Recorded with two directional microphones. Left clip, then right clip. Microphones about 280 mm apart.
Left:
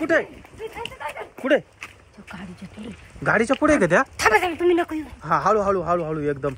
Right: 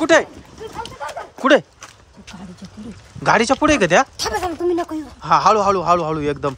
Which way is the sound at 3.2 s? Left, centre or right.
Centre.